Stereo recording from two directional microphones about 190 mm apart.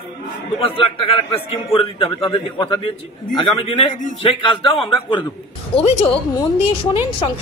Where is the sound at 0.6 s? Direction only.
30° left (ahead or behind).